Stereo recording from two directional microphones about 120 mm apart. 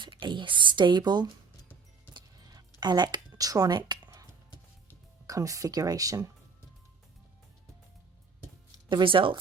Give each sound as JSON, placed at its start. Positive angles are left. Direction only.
{"t": 0.0, "sound": "speech", "side_deg": -40}
{"t": 2.1, "sound": "a sound", "side_deg": -35}
{"t": 5.2, "sound": "speech", "side_deg": -30}
{"t": 8.9, "sound": "speech", "side_deg": -45}